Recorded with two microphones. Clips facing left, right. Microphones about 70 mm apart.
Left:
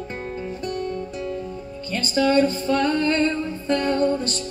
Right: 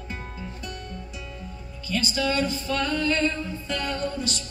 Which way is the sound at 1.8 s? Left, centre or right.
Left.